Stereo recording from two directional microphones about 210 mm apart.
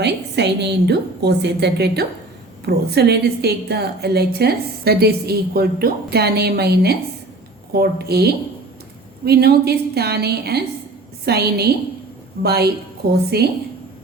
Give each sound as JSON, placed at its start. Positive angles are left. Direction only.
{"t": 0.0, "sound": "a woman's voice", "side_deg": -55}